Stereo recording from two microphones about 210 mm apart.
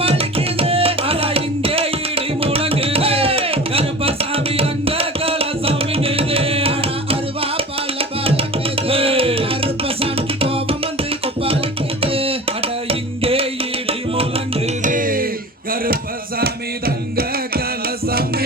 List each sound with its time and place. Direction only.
0.0 s tabla: 25° right (ahead or behind)
12.0 s music: 25° right (ahead or behind)
14.9 s a sound: 40° right (ahead or behind)
16.4 s music: 45° right (ahead or behind)